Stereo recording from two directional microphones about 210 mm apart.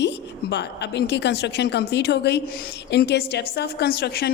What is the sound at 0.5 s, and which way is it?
A woman's voice, 55° left (ahead or behind).